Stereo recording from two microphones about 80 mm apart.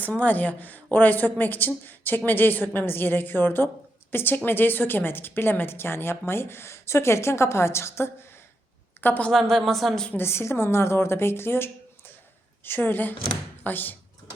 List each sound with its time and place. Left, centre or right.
0.0 s a woman's voice: centre
9.3 s speech: centre
10.1 s speech: left